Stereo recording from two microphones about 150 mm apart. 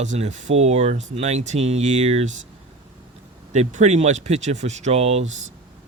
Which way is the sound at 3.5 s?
50° right (ahead or behind).